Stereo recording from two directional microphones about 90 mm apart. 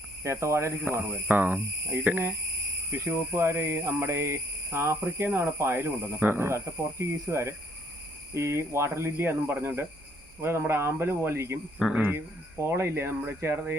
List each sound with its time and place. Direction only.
0.2 s speech: 30° right (ahead or behind)
1.3 s speech: 20° right (ahead or behind)
11.8 s speech: 5° right (ahead or behind)
12.7 s speech: 30° right (ahead or behind)